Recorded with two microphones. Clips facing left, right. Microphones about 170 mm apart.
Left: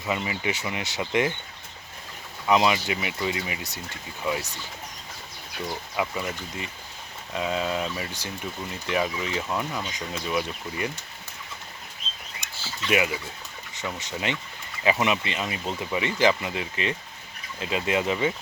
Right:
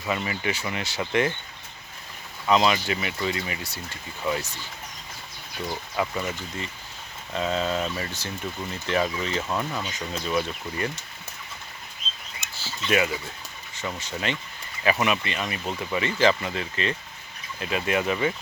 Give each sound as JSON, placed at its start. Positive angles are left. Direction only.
{"t": 0.1, "sound": "speech", "side_deg": 20}
{"t": 2.5, "sound": "speech", "side_deg": 15}
{"t": 6.0, "sound": "speech", "side_deg": 10}
{"t": 9.5, "sound": "speech", "side_deg": 0}
{"t": 10.2, "sound": "speech", "side_deg": 10}
{"t": 12.4, "sound": "a sound", "side_deg": 15}
{"t": 12.9, "sound": "speech", "side_deg": 15}